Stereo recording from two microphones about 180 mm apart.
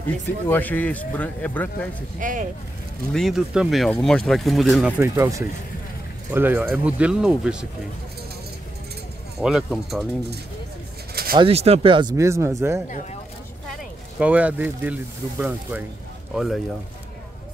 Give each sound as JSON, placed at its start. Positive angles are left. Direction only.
{"t": 0.5, "sound": "speech", "side_deg": 10}
{"t": 2.1, "sound": "speech", "side_deg": -45}
{"t": 3.1, "sound": "speech", "side_deg": 0}
{"t": 9.4, "sound": "speech", "side_deg": -5}
{"t": 11.3, "sound": "speech", "side_deg": -35}
{"t": 14.2, "sound": "speech", "side_deg": -10}